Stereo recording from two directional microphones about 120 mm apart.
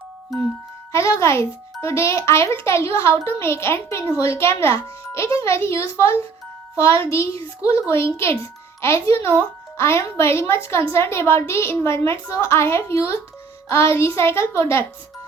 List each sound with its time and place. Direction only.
0.9 s speech: 25° left (ahead or behind)